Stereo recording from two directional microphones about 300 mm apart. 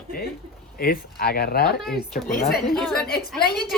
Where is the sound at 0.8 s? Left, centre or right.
Left.